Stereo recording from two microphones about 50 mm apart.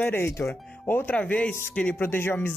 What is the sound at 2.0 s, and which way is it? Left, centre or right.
Speech, left.